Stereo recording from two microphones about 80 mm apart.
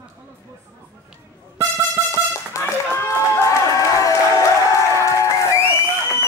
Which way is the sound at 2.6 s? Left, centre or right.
Left.